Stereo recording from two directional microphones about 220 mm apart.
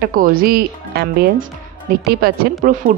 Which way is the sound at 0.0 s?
40° right (ahead or behind).